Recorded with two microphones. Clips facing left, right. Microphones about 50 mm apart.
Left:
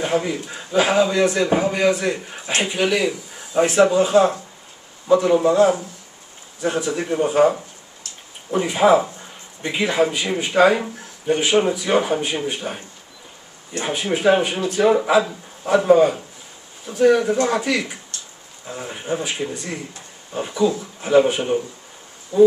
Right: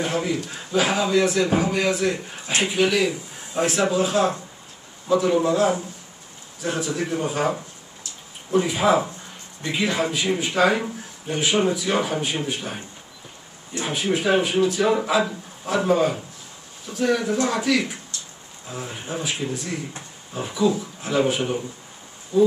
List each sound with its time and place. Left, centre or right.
0.0 s speech: centre
8.6 s speech: centre
9.6 s speech: left
9.8 s speech: centre
13.8 s speech: centre
20.3 s speech: centre